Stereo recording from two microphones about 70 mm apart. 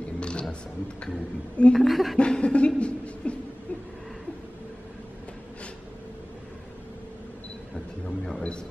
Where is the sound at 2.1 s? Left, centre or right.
Centre.